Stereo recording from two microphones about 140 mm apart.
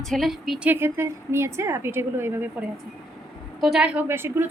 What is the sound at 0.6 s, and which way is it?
A woman's voice, 15° right (ahead or behind).